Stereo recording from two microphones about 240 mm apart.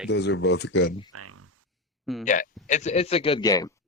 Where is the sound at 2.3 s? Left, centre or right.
Left; by 3.7 s centre.